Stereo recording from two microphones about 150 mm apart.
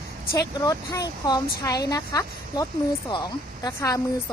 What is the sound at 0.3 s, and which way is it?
Speech, 25° left (ahead or behind).